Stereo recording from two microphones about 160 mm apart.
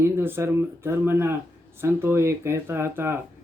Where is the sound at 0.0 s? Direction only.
15° right (ahead or behind).